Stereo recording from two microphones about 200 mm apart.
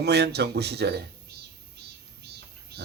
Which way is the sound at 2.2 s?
55° right (ahead or behind).